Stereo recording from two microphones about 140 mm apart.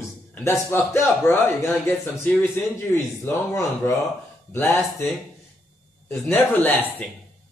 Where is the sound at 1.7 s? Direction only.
5° left (ahead or behind); by 4.0 s 20° left (ahead or behind).